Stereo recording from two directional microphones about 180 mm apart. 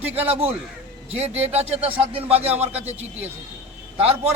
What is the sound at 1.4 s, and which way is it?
Speech, 35° right (ahead or behind).